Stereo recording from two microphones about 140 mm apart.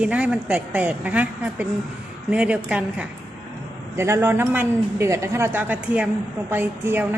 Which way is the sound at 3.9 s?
20° right (ahead or behind).